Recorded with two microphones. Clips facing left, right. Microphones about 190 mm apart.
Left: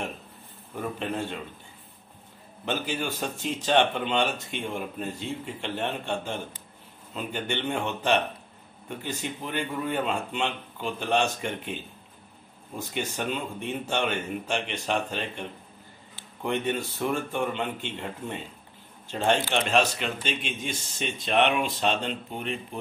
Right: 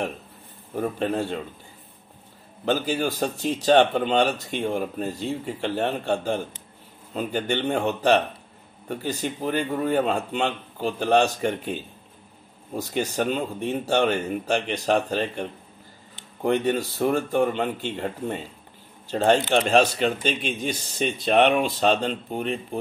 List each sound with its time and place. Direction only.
0.7 s speech: 40° right (ahead or behind)
2.6 s speech: 35° right (ahead or behind)
12.7 s speech: 35° right (ahead or behind)
16.4 s speech: 40° right (ahead or behind)